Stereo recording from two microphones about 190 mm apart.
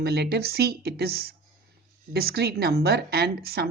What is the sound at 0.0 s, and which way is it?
A woman's voice, 55° right (ahead or behind).